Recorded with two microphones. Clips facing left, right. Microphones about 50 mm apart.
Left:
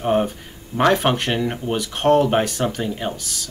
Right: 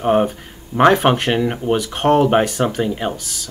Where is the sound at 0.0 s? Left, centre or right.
Centre.